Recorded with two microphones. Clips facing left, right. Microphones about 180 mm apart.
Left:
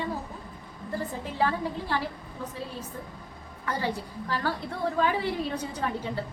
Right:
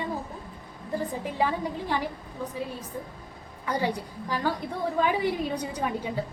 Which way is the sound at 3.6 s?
15° right (ahead or behind).